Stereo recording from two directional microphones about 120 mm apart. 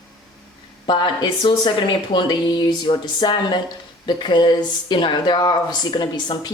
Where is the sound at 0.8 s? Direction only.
40° left (ahead or behind).